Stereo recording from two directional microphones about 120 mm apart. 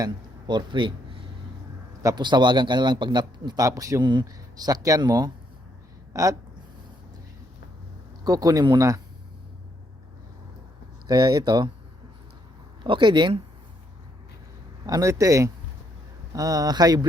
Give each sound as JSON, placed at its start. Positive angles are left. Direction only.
{"t": 0.0, "sound": "speech", "side_deg": -40}
{"t": 2.0, "sound": "a man's voice", "side_deg": -35}
{"t": 8.2, "sound": "speech", "side_deg": -30}
{"t": 11.1, "sound": "speech", "side_deg": -35}
{"t": 12.8, "sound": "speech", "side_deg": -40}
{"t": 14.8, "sound": "a man's voice", "side_deg": -30}